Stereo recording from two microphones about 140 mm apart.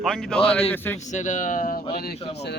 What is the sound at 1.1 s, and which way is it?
Speech, 60° left (ahead or behind).